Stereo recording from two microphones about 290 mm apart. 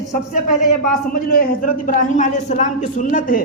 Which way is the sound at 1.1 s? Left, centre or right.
Left.